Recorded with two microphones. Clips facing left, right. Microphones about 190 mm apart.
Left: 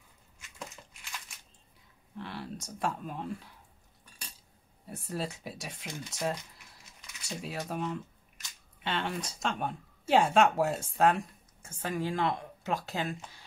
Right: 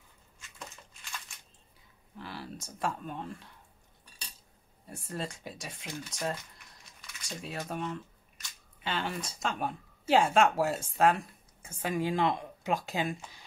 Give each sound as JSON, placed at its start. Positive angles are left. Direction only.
{"t": 2.1, "sound": "speech", "side_deg": 0}
{"t": 4.8, "sound": "speech", "side_deg": 5}
{"t": 11.7, "sound": "speech", "side_deg": -15}